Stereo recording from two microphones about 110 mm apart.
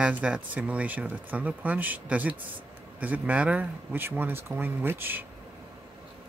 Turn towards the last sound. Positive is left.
turn(degrees=-20)  # may be behind; listen again after turning